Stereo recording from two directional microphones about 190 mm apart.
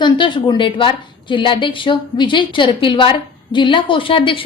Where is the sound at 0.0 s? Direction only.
25° left (ahead or behind).